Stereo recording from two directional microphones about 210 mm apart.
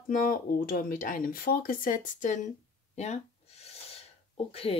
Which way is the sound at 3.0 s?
30° left (ahead or behind).